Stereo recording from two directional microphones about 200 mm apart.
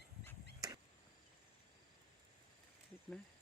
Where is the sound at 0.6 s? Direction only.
20° right (ahead or behind).